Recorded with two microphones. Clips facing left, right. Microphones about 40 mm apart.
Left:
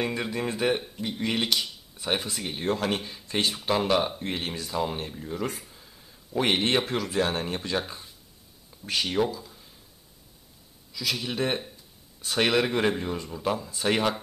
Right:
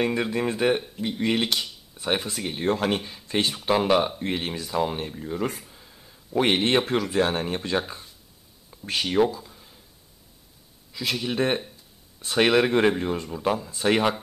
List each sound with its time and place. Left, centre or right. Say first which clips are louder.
0.0 s speech: right 4 dB; centre
5.6 s a sound: right 1 dB; centre
6.9 s speech: right 4 dB; centre
9.0 s speech: right 5 dB; centre
10.9 s a sound: right 2 dB; right
12.3 s speech: right 4 dB; centre